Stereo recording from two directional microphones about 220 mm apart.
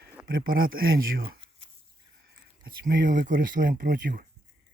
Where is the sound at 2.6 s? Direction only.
40° right (ahead or behind).